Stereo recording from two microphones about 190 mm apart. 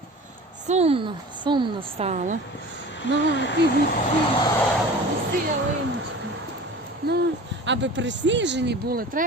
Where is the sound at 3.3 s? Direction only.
70° left (ahead or behind).